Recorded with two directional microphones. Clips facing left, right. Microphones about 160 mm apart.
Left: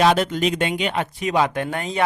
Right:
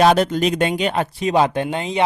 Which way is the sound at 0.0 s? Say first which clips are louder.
Right 3 dB; 40° right (ahead or behind).